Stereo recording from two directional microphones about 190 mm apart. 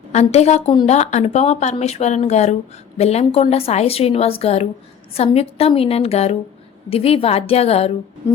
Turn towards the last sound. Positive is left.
turn(degrees=30)  # may be behind; listen again after turning